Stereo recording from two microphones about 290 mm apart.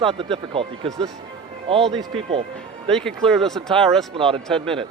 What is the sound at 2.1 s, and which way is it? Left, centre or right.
Speech, centre.